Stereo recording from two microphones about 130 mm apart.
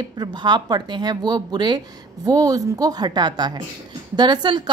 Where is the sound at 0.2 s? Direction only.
35° right (ahead or behind).